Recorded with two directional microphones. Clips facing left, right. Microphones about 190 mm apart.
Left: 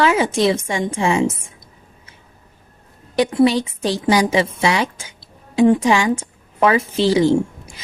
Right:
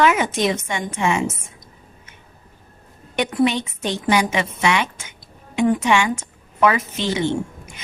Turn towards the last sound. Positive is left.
turn(degrees=35)  # may be behind; listen again after turning